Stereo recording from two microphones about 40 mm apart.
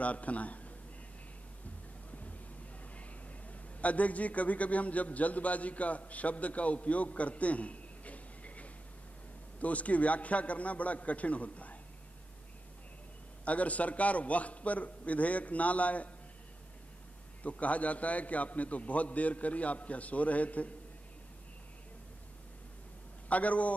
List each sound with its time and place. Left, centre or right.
0.0 s a man's voice: left
3.8 s a man's voice: left
13.5 s a man's voice: left
17.4 s a man's voice: left
23.2 s a man's voice: left